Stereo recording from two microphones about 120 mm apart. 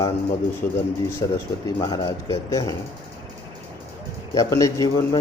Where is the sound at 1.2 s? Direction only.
30° left (ahead or behind).